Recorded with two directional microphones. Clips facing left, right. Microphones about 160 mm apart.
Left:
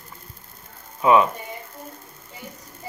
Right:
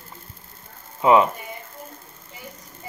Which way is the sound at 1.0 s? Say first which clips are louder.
Right 1 dB; 25° right (ahead or behind).